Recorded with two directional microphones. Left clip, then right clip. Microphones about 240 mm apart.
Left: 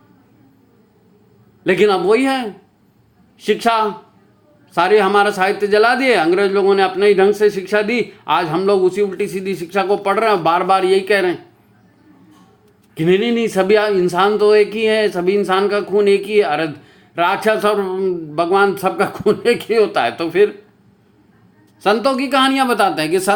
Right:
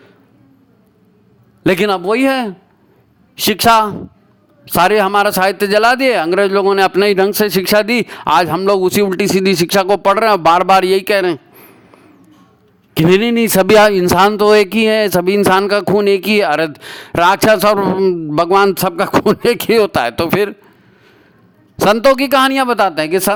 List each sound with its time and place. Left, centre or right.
1.6 s a man's voice: right
12.9 s speech: right
21.8 s speech: right